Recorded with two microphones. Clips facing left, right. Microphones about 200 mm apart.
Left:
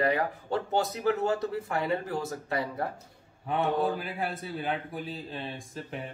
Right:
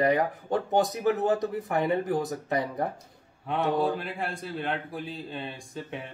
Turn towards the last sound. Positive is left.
turn(degrees=0)  # may be behind; listen again after turning